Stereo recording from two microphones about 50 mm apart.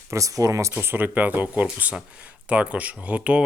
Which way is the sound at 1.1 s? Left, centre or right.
Right.